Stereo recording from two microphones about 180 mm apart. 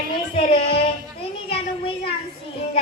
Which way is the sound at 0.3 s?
30° left (ahead or behind).